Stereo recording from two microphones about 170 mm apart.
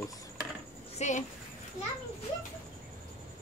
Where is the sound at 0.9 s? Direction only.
45° left (ahead or behind).